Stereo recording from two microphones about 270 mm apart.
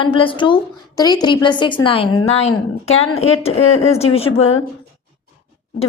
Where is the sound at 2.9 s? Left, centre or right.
Left.